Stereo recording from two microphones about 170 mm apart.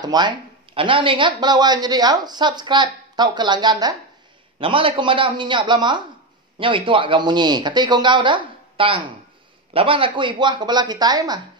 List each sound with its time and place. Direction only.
0.0 s speech: 25° right (ahead or behind)